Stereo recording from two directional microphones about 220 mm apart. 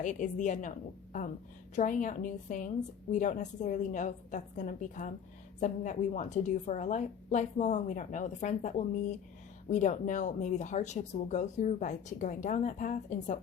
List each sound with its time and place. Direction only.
0.0 s speech: 35° left (ahead or behind)
1.7 s speech: 35° left (ahead or behind)